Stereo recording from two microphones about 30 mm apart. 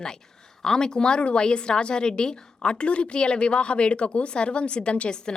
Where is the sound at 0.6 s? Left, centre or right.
Centre; by 5.3 s left.